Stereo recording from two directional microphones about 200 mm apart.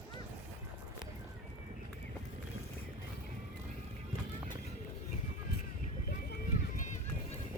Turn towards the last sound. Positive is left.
turn(degrees=40)  # may be behind; listen again after turning